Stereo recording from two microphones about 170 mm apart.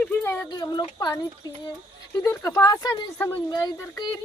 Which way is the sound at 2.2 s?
15° left (ahead or behind).